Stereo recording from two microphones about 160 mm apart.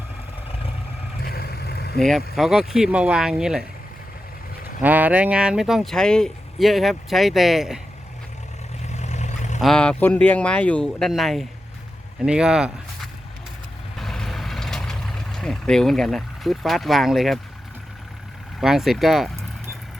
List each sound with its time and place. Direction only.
1.2 s vehicle: 75° left (ahead or behind)
2.0 s speech: centre (ahead or behind)
4.8 s speech: 10° right (ahead or behind)
8.8 s vehicle: 45° left (ahead or behind)
9.6 s speech: 5° left (ahead or behind)
14.0 s vehicle: centre (ahead or behind)
18.6 s speech: centre (ahead or behind)